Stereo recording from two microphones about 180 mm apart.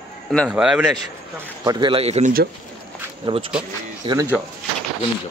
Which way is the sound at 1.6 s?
25° right (ahead or behind).